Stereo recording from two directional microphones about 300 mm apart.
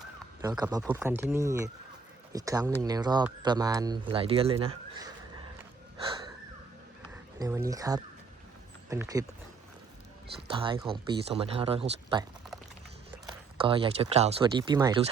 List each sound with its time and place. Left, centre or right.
0.4 s speech: centre
7.1 s speech: centre
10.5 s speech: centre
13.2 s speech: centre